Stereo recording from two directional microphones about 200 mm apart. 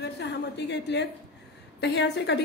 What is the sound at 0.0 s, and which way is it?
A woman's voice, 55° left (ahead or behind).